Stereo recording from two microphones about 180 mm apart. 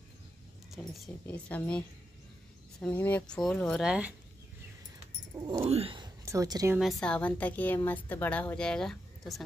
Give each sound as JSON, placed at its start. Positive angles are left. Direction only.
{"t": 0.7, "sound": "a woman's voice", "side_deg": 0}
{"t": 5.3, "sound": "speech", "side_deg": -15}
{"t": 5.7, "sound": "speech", "side_deg": -30}
{"t": 6.2, "sound": "speech", "side_deg": -20}
{"t": 6.8, "sound": "a woman's voice", "side_deg": 0}